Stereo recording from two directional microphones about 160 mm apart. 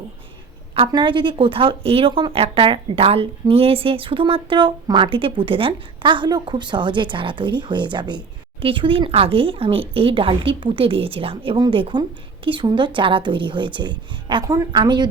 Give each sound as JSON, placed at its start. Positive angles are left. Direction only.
{"t": 0.9, "sound": "a woman's voice", "side_deg": -30}